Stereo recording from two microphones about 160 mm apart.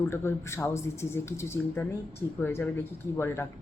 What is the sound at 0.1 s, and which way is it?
Speech, 15° left (ahead or behind).